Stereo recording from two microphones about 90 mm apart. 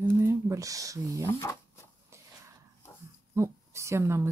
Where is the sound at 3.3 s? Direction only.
30° right (ahead or behind).